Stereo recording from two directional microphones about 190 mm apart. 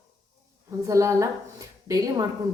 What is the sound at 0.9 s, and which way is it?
Speech, 15° right (ahead or behind).